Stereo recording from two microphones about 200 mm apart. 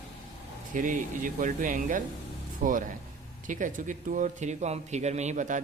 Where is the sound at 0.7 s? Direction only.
40° right (ahead or behind).